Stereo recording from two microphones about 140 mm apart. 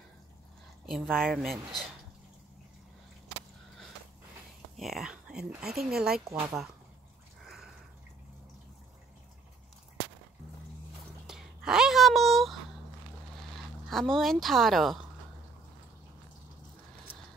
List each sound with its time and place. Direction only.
0.8 s speech: centre (ahead or behind)
4.7 s speech: centre (ahead or behind)
6.2 s speech: 20° right (ahead or behind)
7.4 s sniff: 5° right (ahead or behind)
11.2 s a sound: 5° right (ahead or behind)
13.6 s speech: centre (ahead or behind)